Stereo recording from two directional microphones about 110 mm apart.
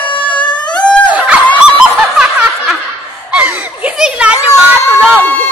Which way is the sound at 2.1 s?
5° right (ahead or behind).